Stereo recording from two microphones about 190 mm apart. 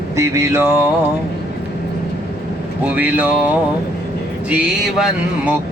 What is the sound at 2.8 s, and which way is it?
Mantra, 10° right (ahead or behind).